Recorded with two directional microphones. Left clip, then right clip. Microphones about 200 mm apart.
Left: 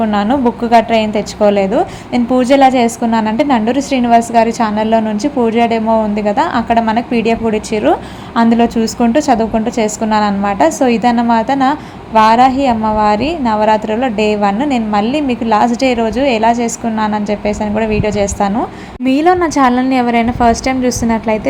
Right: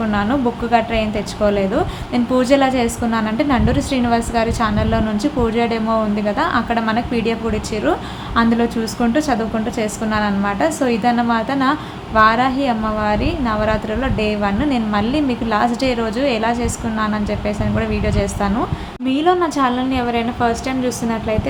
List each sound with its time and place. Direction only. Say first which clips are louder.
0.0 s a woman's voice: left 6 dB; 20° left (ahead or behind)